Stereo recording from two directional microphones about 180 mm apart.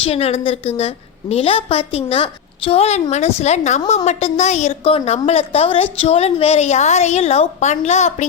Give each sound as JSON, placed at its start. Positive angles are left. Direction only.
{"t": 0.0, "sound": "a woman's voice", "side_deg": 35}